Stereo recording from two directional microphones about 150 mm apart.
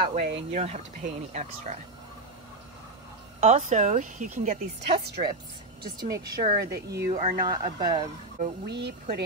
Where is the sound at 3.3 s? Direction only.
50° right (ahead or behind).